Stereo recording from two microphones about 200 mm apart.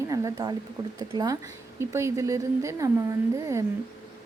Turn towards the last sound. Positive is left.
turn(degrees=-15)  # may be behind; listen again after turning